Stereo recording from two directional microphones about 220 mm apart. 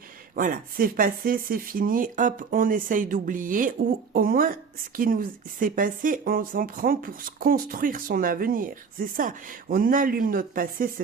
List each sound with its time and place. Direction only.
0.3 s speech: 40° right (ahead or behind)